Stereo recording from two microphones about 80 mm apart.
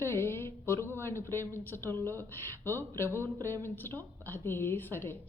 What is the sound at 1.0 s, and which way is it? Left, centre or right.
Speech, left.